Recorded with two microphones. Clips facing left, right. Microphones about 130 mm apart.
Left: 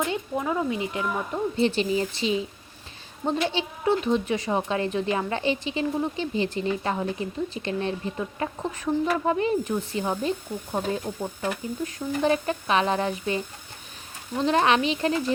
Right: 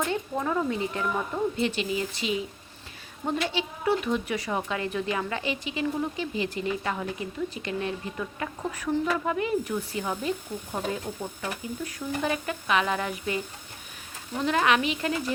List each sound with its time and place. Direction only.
0.0 s speech: 15° left (ahead or behind)
1.5 s a woman's voice: 30° left (ahead or behind)
14.4 s a woman's voice: 30° left (ahead or behind)